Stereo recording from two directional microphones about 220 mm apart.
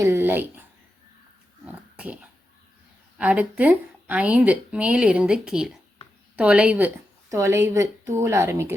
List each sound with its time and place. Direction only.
0.0 s a sound: 10° right (ahead or behind)
1.6 s dog: 5° right (ahead or behind)
3.2 s a woman's voice: 5° right (ahead or behind)